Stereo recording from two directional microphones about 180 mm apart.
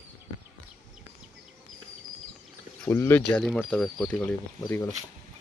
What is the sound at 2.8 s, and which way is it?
Speech, 15° left (ahead or behind).